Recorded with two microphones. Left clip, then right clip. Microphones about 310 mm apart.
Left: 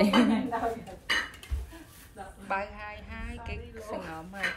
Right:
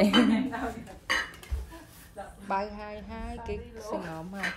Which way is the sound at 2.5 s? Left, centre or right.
Centre.